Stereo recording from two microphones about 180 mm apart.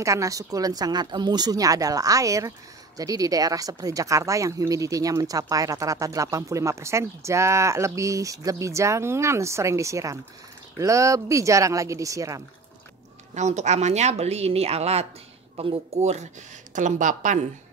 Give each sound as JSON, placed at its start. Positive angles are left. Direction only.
{"t": 0.0, "sound": "speech", "side_deg": -15}
{"t": 13.3, "sound": "speech", "side_deg": -40}